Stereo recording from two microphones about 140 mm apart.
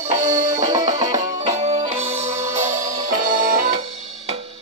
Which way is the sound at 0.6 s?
30° right (ahead or behind).